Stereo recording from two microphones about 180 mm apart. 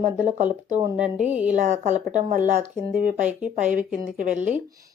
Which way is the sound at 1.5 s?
40° right (ahead or behind).